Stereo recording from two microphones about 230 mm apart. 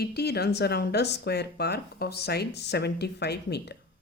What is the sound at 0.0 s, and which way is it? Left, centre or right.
Speech, left.